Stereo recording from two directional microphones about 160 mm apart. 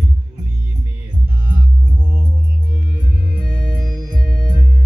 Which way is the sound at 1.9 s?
10° right (ahead or behind).